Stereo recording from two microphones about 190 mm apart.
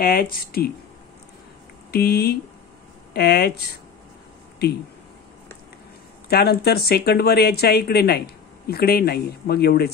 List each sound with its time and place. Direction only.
0.0 s speech: 50° left (ahead or behind)
1.9 s speech: 55° left (ahead or behind)
6.2 s speech: 55° left (ahead or behind)